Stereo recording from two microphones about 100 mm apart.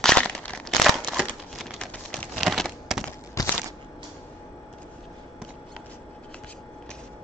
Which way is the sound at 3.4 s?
35° left (ahead or behind).